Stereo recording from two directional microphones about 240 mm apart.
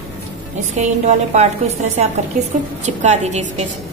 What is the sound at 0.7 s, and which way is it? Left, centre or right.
Speech, right.